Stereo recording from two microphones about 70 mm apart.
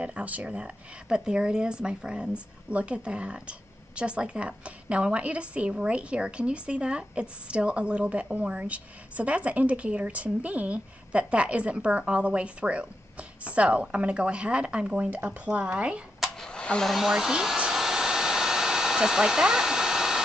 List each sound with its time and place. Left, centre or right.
0.0 s speech: centre
16.3 s a sound: centre
16.9 s hair dryer: centre